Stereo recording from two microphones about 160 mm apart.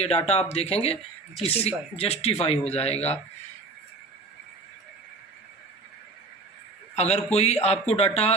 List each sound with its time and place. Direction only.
0.3 s speech: 40° left (ahead or behind)
6.9 s a man's voice: 45° left (ahead or behind)